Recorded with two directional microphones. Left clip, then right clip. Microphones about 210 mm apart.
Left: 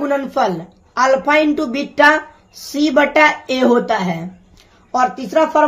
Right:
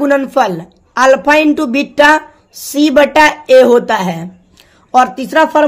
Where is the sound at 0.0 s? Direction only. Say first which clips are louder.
Right 6 dB; 35° right (ahead or behind).